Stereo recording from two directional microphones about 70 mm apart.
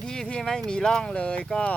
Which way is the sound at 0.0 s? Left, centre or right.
Centre.